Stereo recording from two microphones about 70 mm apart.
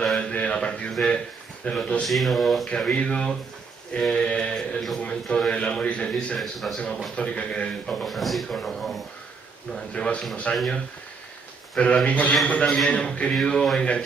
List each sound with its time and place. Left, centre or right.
0.0 s a sound: centre
0.3 s a man's voice: centre
2.0 s speech: centre
2.7 s a man's voice: centre
6.4 s speech: centre
7.2 s a man's voice: centre